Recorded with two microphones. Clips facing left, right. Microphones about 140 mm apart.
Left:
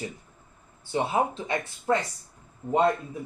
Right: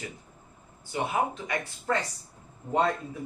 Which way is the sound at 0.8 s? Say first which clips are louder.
Left 3 dB; 30° left (ahead or behind).